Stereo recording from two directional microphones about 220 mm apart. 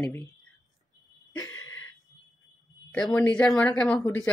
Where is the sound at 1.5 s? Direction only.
65° left (ahead or behind).